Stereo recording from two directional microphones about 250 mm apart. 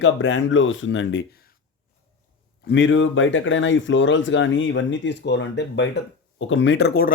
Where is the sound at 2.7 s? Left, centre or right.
Left.